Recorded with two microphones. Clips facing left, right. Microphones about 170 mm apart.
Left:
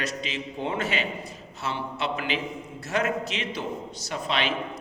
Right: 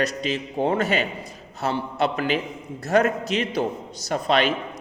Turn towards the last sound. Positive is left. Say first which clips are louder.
# right 7 dB
turn(degrees=-45)  # may be behind; listen again after turning